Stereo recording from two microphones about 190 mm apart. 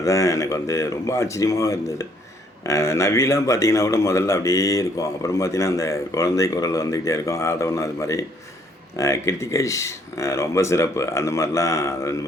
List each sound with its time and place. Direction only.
0.0 s a man's voice: 15° left (ahead or behind)